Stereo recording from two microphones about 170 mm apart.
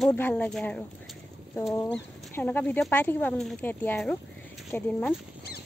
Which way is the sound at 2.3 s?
10° left (ahead or behind).